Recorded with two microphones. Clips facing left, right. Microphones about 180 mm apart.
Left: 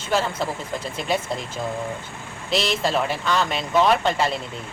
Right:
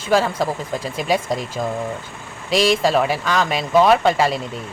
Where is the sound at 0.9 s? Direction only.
10° right (ahead or behind).